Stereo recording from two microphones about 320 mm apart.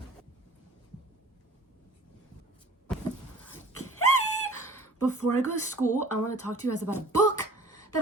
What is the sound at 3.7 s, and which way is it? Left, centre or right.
Dog, left.